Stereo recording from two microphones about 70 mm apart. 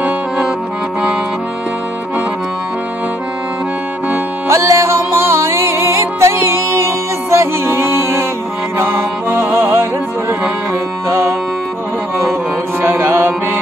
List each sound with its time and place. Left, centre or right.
4.5 s music: right
11.1 s music: right
12.8 s mantra: right